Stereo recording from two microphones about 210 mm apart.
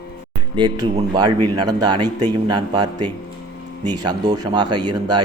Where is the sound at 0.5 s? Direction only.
20° right (ahead or behind).